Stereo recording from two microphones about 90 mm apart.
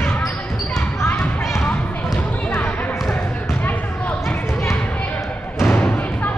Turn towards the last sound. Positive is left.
turn(degrees=15)  # may be behind; listen again after turning